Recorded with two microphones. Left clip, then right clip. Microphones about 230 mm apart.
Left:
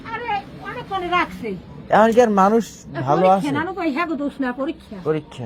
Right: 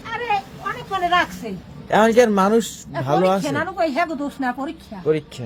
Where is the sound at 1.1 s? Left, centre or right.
Centre.